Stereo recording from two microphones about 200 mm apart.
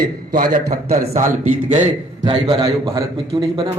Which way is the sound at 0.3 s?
45° right (ahead or behind).